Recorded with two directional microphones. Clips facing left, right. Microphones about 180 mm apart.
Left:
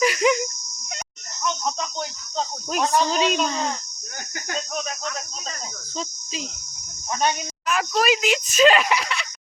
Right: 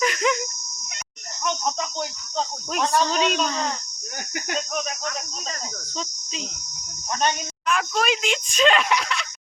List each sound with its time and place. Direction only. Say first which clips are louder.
0.0 s insect: left 3 dB; 10° left (ahead or behind)
2.9 s speech: left 1 dB; 5° left (ahead or behind)
7.2 s a woman's voice: left 1 dB; 5° left (ahead or behind)